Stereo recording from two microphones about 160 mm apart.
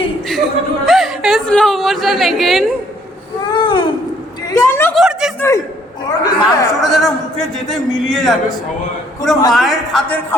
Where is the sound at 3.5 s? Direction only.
30° left (ahead or behind).